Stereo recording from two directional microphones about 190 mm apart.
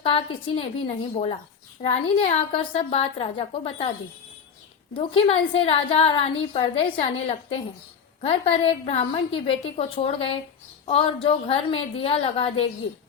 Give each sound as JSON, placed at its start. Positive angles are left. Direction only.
{"t": 0.0, "sound": "a woman's voice", "side_deg": 30}
{"t": 4.9, "sound": "a woman's voice", "side_deg": 30}